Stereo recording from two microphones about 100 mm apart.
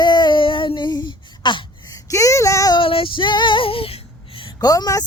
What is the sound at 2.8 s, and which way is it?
Female singing, 65° left (ahead or behind).